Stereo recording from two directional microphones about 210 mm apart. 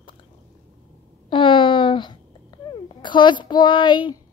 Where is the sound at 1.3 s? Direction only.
25° left (ahead or behind).